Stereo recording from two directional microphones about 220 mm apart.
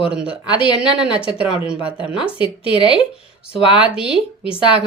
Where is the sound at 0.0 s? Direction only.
5° right (ahead or behind).